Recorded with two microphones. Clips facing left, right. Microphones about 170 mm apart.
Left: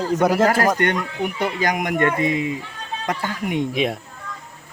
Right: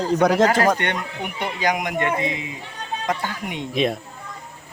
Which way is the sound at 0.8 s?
45° left (ahead or behind).